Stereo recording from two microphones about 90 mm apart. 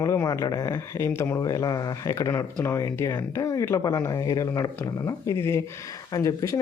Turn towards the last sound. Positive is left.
turn(degrees=40)  # may be behind; listen again after turning